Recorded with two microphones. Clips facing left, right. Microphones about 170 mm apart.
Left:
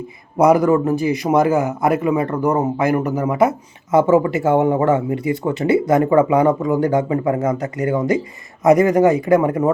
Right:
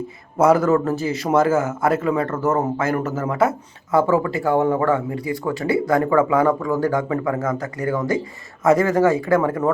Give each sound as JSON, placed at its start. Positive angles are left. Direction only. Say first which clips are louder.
{"t": 0.3, "sound": "a man's voice", "louder": "left 2 dB", "side_deg": 15}